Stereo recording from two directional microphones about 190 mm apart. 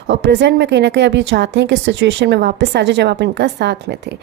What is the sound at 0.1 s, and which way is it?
A woman's voice, 65° right (ahead or behind).